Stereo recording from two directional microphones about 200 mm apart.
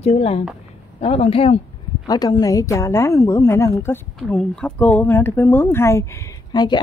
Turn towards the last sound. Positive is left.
turn(degrees=20)  # may be behind; listen again after turning